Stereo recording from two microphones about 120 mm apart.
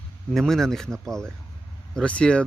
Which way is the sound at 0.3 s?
5° left (ahead or behind).